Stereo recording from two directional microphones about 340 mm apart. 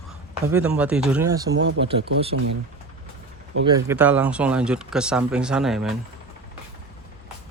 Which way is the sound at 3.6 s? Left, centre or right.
Centre.